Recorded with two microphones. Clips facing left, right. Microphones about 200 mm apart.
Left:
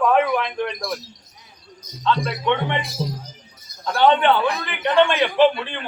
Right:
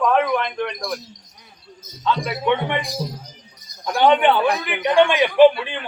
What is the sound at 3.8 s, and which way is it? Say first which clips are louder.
A man's voice: right 1 dB; 15° right (ahead or behind).